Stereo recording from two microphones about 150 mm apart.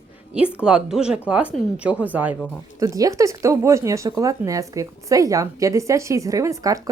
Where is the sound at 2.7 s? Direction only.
20° right (ahead or behind).